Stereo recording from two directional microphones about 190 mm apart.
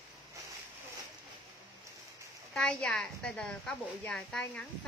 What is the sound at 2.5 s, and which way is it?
A woman's voice, 5° left (ahead or behind).